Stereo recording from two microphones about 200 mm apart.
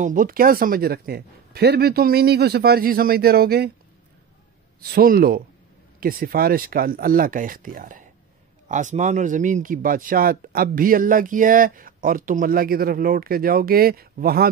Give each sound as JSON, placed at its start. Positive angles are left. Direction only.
{"t": 0.0, "sound": "speech", "side_deg": -40}
{"t": 4.7, "sound": "speech", "side_deg": -50}